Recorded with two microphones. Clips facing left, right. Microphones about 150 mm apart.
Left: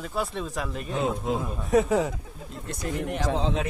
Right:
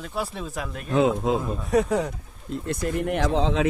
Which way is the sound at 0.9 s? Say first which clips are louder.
Right 7 dB; 90° right.